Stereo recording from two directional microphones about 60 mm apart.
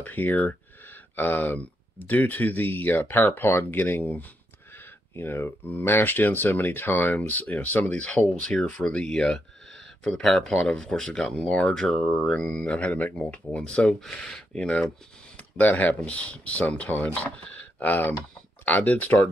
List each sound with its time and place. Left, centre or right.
0.0 s speech: left
7.2 s speech: left
15.3 s speech: left